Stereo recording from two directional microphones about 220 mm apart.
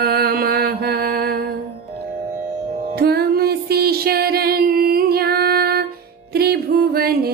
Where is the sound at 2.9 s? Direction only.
45° right (ahead or behind).